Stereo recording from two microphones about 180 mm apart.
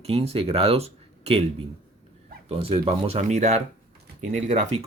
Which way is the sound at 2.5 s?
30° right (ahead or behind).